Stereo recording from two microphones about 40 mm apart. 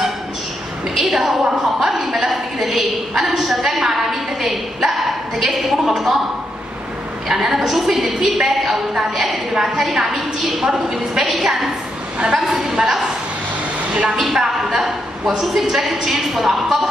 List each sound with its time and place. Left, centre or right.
0.9 s a woman's voice: centre
5.4 s a sound: centre
7.2 s a woman's voice: centre
12.2 s a woman's voice: centre
14.1 s a woman's voice: centre